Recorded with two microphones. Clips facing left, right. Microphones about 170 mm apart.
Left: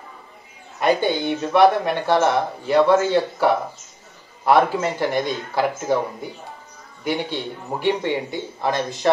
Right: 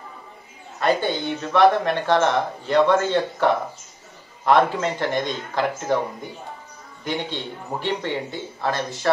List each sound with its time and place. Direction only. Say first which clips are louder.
0.7 s speech: left 2 dB; 10° left (ahead or behind)
7.1 s speech: left 3 dB; 10° left (ahead or behind)